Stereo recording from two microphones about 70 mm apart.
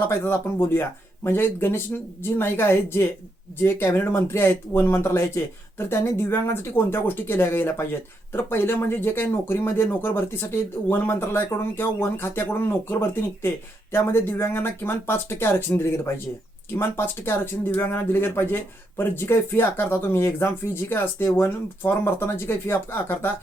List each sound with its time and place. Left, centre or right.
0.1 s speech: left